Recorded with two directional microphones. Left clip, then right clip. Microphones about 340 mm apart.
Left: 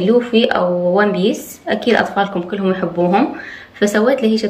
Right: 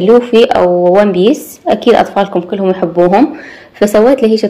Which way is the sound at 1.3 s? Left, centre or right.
Centre.